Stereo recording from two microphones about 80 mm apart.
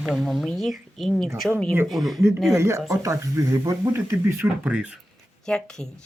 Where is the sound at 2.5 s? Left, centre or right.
Right.